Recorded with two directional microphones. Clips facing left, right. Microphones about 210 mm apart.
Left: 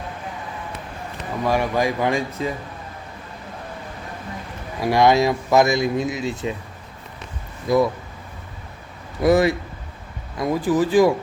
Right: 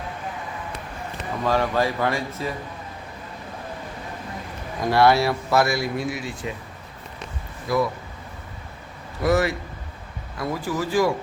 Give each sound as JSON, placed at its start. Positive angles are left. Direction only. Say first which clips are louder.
{"t": 1.5, "sound": "speech", "louder": "left 1 dB", "side_deg": 15}
{"t": 4.8, "sound": "speech", "louder": "left 2 dB", "side_deg": 15}
{"t": 7.7, "sound": "speech", "louder": "left 5 dB", "side_deg": 20}
{"t": 9.2, "sound": "speech", "louder": "left 4 dB", "side_deg": 15}